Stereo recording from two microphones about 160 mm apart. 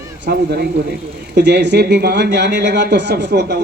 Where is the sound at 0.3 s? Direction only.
80° right.